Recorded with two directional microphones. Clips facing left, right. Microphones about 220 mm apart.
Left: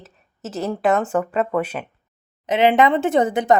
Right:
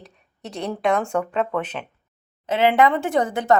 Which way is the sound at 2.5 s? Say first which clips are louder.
Left 2 dB; 20° left (ahead or behind).